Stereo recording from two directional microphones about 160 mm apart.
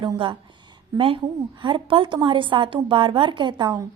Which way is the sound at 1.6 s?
30° right (ahead or behind).